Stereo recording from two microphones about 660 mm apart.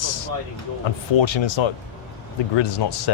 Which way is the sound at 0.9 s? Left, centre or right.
Left.